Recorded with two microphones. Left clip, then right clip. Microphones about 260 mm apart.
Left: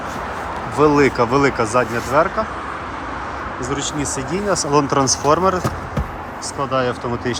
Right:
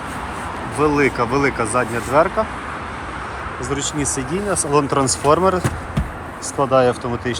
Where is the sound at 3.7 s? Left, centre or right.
Centre.